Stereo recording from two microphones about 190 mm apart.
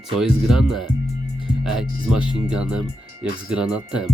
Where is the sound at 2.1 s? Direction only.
5° right (ahead or behind).